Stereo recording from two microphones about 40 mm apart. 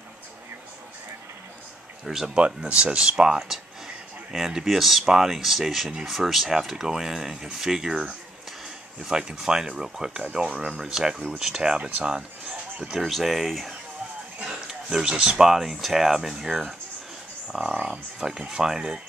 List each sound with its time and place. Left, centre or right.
2.0 s speech: centre
2.3 s speech: right
3.3 s a sound: centre
4.6 s speech: centre
11.6 s speech: right
13.2 s speech: centre
14.9 s speech: centre
15.5 s speech: centre
16.4 s speech: centre
17.5 s speech: centre